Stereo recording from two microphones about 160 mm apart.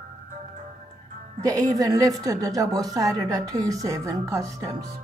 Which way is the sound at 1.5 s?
20° right (ahead or behind).